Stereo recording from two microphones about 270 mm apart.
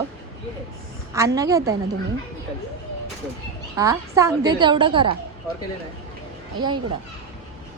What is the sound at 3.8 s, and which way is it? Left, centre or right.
A woman's voice, centre.